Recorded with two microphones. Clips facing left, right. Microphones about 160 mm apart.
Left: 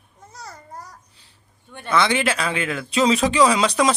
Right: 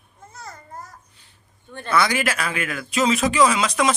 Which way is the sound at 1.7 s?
20° left (ahead or behind).